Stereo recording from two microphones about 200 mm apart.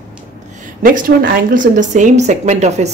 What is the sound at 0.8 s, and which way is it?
Speech, 45° right (ahead or behind).